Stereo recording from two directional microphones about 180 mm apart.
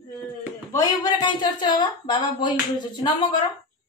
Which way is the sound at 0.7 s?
20° left (ahead or behind).